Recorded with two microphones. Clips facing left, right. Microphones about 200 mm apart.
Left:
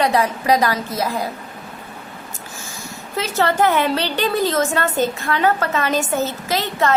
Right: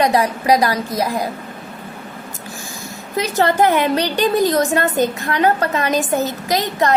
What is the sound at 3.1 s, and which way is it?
A woman's voice, 15° right (ahead or behind).